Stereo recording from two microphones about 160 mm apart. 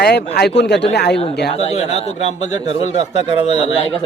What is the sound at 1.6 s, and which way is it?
Speech, 40° left (ahead or behind).